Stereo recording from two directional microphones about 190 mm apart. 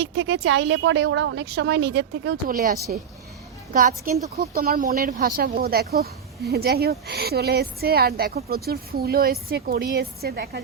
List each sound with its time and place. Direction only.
0.0 s a woman's voice: 70° right (ahead or behind)